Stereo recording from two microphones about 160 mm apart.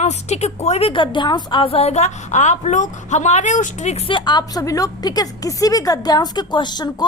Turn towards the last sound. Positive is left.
turn(degrees=25)  # may be behind; listen again after turning